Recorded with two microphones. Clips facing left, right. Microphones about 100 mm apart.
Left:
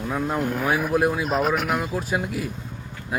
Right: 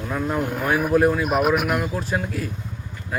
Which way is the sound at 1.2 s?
15° right (ahead or behind).